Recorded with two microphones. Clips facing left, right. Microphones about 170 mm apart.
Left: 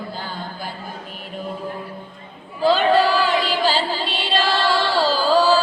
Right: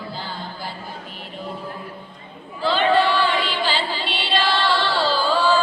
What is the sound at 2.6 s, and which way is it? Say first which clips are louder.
Music: left 3 dB; 40° left (ahead or behind).